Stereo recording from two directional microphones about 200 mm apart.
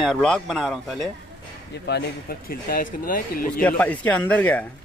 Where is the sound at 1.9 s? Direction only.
50° left (ahead or behind).